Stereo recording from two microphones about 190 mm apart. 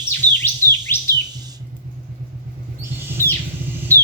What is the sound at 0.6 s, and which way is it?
Bird, 15° right (ahead or behind).